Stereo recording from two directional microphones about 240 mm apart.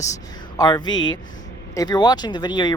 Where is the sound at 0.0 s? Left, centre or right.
Centre.